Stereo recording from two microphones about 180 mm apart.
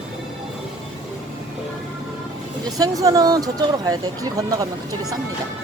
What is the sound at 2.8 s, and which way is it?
Speech, 20° right (ahead or behind).